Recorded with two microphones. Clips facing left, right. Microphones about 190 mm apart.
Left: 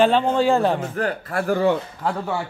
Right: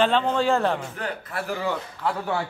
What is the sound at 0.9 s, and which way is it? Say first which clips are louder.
Speech: left 7 dB; 45° left (ahead or behind).